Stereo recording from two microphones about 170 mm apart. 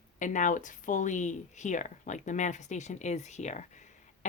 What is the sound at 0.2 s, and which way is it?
Speech, 45° left (ahead or behind).